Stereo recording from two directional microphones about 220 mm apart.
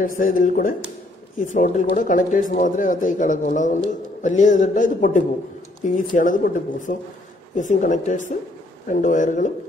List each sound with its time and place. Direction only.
0.0 s a man's voice: 40° left (ahead or behind)